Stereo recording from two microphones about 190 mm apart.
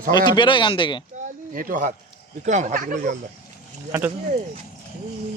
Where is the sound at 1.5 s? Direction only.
45° right (ahead or behind).